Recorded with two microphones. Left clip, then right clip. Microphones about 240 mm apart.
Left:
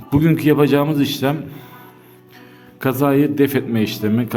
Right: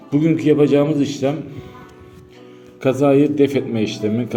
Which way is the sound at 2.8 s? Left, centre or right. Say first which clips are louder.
Right 2 dB; left.